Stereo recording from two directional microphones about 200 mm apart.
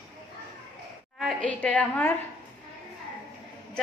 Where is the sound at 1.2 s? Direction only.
5° left (ahead or behind).